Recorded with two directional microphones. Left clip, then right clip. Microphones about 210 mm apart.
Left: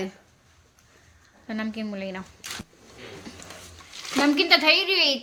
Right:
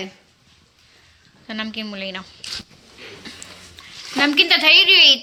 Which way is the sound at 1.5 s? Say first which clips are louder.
Right 4 dB; 5° left (ahead or behind).